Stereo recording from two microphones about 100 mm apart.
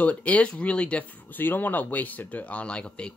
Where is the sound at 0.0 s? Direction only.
15° left (ahead or behind).